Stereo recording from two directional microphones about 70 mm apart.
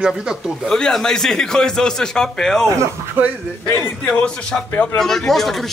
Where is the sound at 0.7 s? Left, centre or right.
Centre.